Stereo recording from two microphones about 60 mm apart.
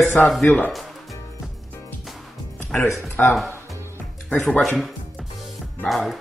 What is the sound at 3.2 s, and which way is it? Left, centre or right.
Speech, left.